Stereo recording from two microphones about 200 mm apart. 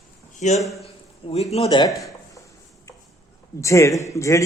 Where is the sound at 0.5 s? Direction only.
Centre (ahead or behind).